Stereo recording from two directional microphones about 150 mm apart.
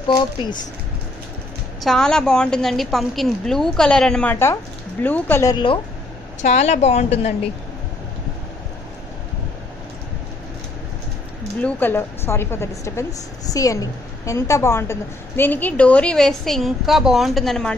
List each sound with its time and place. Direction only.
0.1 s speech: 30° left (ahead or behind)
1.8 s a woman's voice: centre (ahead or behind)
6.4 s a woman's voice: 50° left (ahead or behind)
11.6 s a woman's voice: 15° left (ahead or behind)